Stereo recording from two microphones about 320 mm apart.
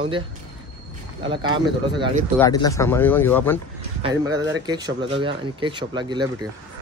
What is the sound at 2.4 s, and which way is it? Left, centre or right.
Speech, centre.